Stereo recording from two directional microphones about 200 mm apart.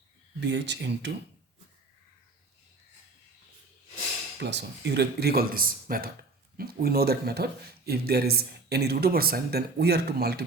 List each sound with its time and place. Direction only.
0.3 s speech: 60° right (ahead or behind)
4.4 s speech: 60° right (ahead or behind)